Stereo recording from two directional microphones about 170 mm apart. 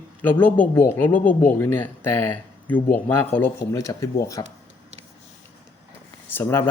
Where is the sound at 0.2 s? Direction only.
10° left (ahead or behind).